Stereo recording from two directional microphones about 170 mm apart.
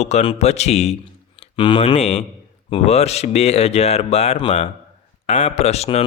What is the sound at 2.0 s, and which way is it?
Speech, 40° left (ahead or behind).